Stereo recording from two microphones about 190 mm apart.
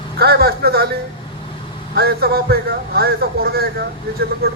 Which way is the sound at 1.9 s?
55° right (ahead or behind).